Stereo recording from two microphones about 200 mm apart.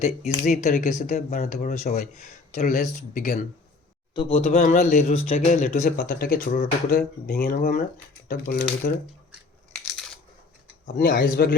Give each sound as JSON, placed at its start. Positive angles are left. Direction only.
{"t": 0.4, "sound": "speech", "side_deg": 35}
{"t": 4.1, "sound": "speech", "side_deg": 25}
{"t": 6.0, "sound": "speech", "side_deg": 45}
{"t": 10.8, "sound": "speech", "side_deg": 45}